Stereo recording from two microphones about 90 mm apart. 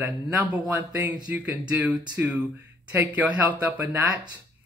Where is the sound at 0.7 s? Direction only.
20° right (ahead or behind).